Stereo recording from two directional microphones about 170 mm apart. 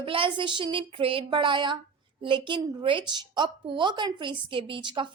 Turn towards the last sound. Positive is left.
turn(degrees=-30)  # may be behind; listen again after turning